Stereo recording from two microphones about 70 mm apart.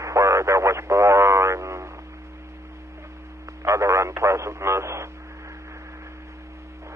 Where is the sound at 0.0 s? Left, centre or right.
Right.